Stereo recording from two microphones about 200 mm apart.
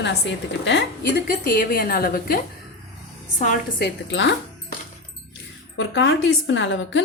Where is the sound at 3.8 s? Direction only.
65° left (ahead or behind).